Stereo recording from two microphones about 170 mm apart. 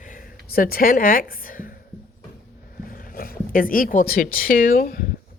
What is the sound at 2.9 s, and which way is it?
Speech, 55° left (ahead or behind).